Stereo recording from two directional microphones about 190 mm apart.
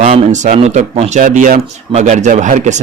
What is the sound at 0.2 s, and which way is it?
Speech, 35° right (ahead or behind).